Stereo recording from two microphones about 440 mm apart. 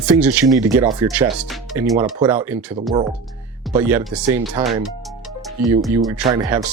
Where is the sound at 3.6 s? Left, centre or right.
Centre.